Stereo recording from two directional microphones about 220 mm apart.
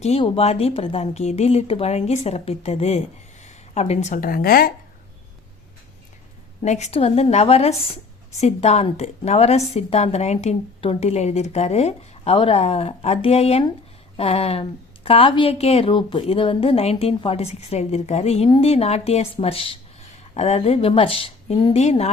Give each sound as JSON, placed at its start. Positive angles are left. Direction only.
{"t": 0.0, "sound": "a woman's voice", "side_deg": 25}
{"t": 6.6, "sound": "a woman's voice", "side_deg": 30}